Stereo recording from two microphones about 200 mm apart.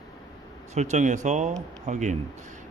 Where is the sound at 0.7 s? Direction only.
35° right (ahead or behind).